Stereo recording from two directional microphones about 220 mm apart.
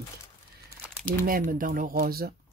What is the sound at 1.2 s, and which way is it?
Speech, 40° right (ahead or behind).